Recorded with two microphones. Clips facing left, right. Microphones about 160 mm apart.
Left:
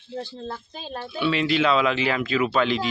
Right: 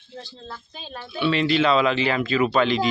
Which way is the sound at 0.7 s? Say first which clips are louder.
Left 4 dB; 40° left (ahead or behind).